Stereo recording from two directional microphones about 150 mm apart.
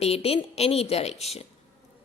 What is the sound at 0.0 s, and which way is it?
A woman's voice, 45° left (ahead or behind).